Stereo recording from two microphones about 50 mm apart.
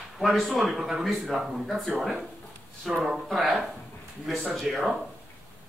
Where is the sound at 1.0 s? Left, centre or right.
Centre.